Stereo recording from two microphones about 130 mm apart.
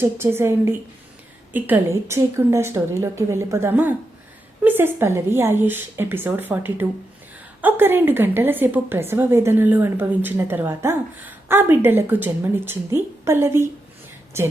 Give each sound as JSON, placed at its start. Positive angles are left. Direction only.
{"t": 0.0, "sound": "a woman's voice", "side_deg": -20}